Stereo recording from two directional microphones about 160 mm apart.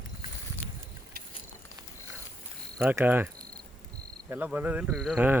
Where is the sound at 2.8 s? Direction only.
10° right (ahead or behind).